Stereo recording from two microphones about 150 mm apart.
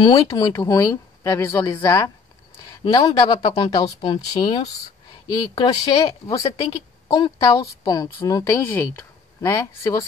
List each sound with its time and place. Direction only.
0.0 s a woman's voice: 25° left (ahead or behind)